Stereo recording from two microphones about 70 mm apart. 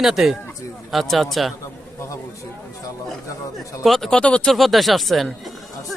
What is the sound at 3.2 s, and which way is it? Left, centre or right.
Speech, left.